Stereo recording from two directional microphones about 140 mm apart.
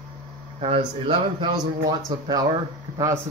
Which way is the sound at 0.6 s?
40° right (ahead or behind).